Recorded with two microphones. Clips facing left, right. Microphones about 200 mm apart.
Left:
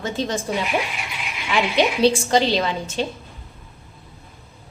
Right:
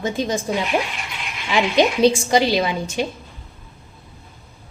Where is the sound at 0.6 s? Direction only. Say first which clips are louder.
Right 2 dB; 5° left (ahead or behind).